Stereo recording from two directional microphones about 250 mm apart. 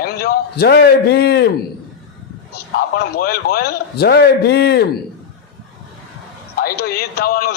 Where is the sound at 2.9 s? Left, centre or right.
Left.